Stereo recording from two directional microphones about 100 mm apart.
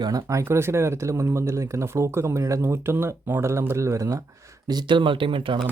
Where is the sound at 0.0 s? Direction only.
40° right (ahead or behind); by 5.5 s 55° right (ahead or behind).